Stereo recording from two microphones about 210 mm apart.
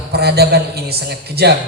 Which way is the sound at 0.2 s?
50° right (ahead or behind).